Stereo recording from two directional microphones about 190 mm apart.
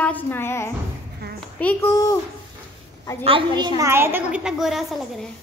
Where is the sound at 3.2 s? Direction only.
25° right (ahead or behind).